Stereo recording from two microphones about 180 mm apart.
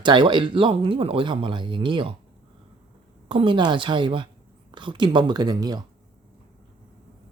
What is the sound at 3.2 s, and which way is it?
Speech, 30° right (ahead or behind).